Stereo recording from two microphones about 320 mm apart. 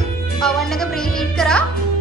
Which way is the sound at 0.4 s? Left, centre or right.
Centre.